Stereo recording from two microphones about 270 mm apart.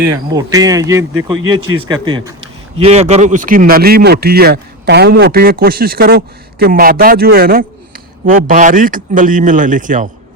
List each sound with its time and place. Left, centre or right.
0.3 s speech: centre; by 10.1 s right